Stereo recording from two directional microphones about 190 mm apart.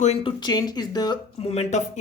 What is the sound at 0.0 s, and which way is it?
Speech, 30° left (ahead or behind).